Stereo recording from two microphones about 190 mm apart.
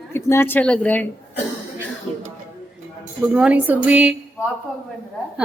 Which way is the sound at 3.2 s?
5° right (ahead or behind).